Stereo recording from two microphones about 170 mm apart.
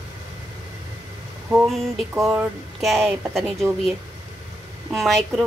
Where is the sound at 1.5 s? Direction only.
Centre (ahead or behind).